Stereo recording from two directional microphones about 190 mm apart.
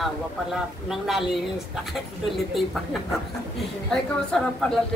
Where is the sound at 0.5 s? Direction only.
Centre (ahead or behind).